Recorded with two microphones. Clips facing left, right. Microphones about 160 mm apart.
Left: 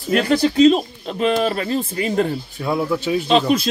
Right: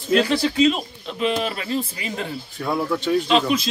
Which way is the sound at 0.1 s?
50° left (ahead or behind).